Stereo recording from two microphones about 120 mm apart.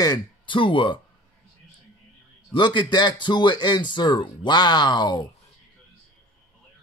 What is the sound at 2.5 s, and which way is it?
Speech, 40° left (ahead or behind).